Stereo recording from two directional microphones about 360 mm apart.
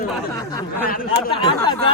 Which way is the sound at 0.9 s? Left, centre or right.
Left.